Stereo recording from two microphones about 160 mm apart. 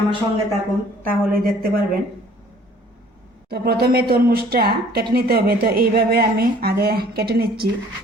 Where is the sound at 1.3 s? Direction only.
65° right (ahead or behind).